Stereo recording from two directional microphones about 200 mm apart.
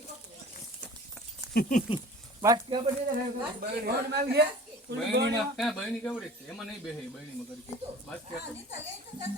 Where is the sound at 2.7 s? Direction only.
25° right (ahead or behind).